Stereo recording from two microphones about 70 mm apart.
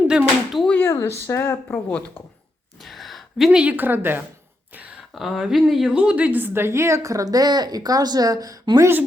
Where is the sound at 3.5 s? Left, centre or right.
Centre.